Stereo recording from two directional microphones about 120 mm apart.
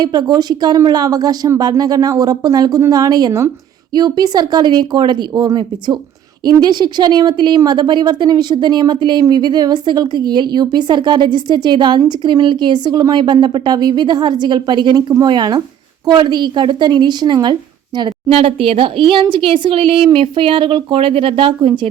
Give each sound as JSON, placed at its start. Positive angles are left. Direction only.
{"t": 0.0, "sound": "a woman's voice", "side_deg": -35}
{"t": 18.3, "sound": "speech", "side_deg": -50}